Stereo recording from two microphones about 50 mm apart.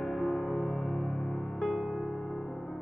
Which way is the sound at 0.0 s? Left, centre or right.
Centre.